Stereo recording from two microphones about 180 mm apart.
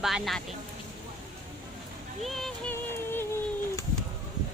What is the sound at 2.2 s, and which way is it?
Speech, centre (ahead or behind).